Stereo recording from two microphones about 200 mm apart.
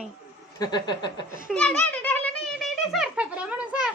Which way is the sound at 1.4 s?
5° left (ahead or behind).